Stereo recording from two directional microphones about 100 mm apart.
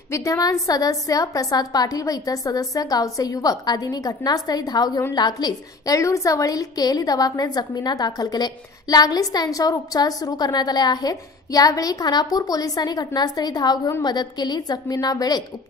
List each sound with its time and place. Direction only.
0.1 s a woman's voice: 30° left (ahead or behind)